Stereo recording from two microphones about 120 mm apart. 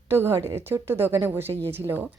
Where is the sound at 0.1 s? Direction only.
20° right (ahead or behind).